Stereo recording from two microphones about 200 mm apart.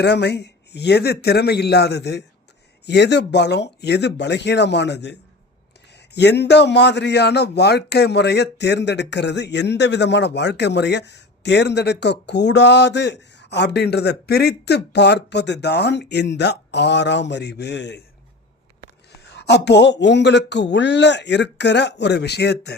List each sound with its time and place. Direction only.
0.0 s speech: 60° left (ahead or behind)
6.1 s speech: 55° left (ahead or behind)
19.2 s speech: 55° left (ahead or behind)